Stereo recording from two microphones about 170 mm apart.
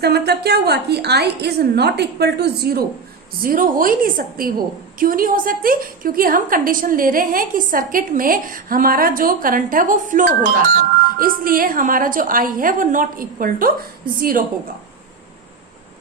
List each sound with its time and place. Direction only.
0.0 s a woman's voice: 70° right (ahead or behind)
3.4 s a woman's voice: 55° right (ahead or behind)